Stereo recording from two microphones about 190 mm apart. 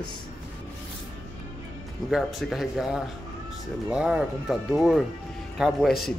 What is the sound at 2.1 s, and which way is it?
Speech, centre (ahead or behind).